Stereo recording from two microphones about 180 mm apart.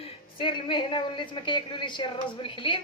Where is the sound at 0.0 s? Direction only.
30° left (ahead or behind).